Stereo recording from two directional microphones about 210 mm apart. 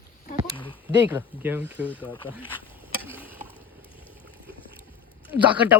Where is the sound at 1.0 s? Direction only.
10° right (ahead or behind).